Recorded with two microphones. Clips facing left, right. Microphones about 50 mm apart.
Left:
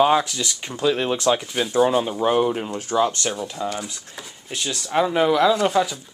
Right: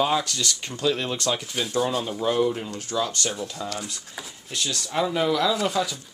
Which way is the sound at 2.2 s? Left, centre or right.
Left.